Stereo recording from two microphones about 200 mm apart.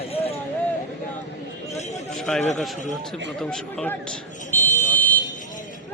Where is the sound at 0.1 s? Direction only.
30° left (ahead or behind).